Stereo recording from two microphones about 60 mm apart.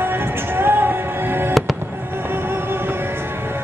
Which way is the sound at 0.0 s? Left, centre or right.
Right.